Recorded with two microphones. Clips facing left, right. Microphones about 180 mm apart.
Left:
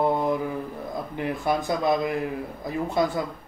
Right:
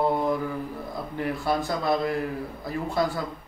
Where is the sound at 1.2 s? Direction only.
20° left (ahead or behind).